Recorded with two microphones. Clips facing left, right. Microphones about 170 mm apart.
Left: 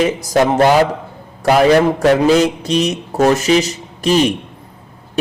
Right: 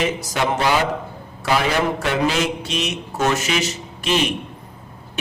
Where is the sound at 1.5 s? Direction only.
45° left (ahead or behind).